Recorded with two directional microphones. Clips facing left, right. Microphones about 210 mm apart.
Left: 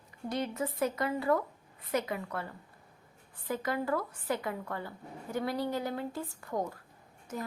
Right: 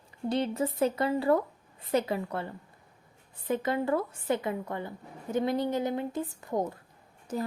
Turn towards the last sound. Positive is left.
turn(degrees=-30)  # may be behind; listen again after turning